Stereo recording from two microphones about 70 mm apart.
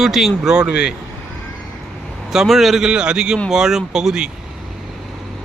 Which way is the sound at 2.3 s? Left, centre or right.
Centre.